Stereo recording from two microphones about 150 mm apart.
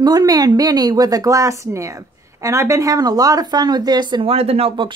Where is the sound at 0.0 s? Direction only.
25° right (ahead or behind).